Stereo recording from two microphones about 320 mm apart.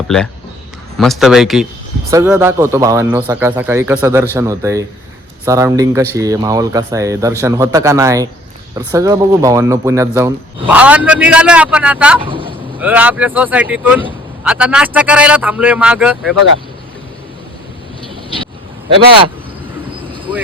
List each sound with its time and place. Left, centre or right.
0.9 s a man's voice: centre
12.2 s vehicle: centre
12.8 s a man's voice: centre